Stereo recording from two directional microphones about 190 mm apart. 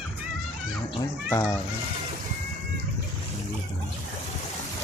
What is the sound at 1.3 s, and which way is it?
Speech, 15° left (ahead or behind).